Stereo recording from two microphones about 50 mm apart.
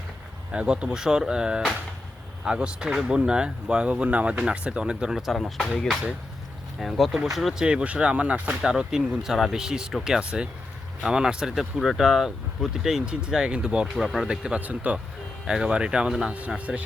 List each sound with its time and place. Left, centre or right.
0.5 s speech: right
3.2 s speech: centre
5.3 s speech: centre
6.7 s speech: centre
7.6 s speech: right
8.6 s speech: centre
13.8 s speech: centre
14.3 s speech: centre
14.6 s speech: right
15.4 s speech: centre